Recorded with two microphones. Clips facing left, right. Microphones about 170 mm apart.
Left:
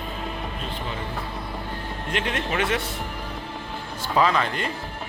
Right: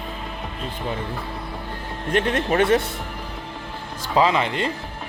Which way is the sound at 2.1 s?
45° right (ahead or behind).